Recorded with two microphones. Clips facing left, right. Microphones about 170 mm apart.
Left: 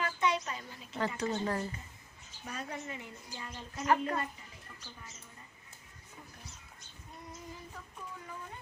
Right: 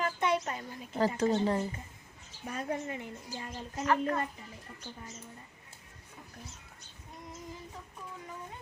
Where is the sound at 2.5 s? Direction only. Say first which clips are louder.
Right 6 dB; 50° right (ahead or behind).